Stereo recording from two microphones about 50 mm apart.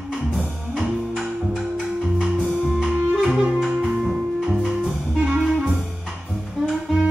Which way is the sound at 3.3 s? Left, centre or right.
Right.